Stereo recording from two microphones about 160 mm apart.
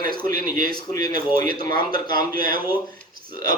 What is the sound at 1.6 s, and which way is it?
Speech, 65° right (ahead or behind).